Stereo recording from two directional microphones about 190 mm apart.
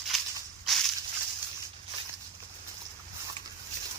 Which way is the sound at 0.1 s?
Centre (ahead or behind).